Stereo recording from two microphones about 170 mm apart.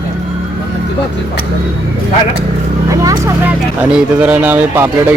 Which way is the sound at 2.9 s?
20° right (ahead or behind).